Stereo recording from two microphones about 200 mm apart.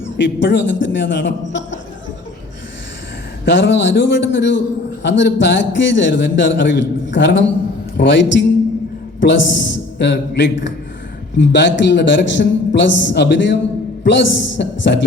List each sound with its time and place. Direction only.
0.2 s a man's voice: 65° left (ahead or behind)
3.4 s a man's voice: 65° left (ahead or behind)